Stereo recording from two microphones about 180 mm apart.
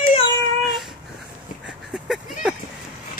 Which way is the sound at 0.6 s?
Centre (ahead or behind).